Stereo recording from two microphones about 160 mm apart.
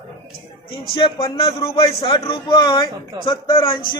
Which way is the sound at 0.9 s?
35° left (ahead or behind).